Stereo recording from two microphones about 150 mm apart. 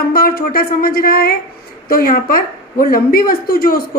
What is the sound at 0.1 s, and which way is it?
A woman's voice, 80° left.